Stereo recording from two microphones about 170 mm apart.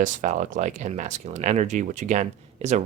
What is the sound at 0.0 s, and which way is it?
Speech, 50° right (ahead or behind).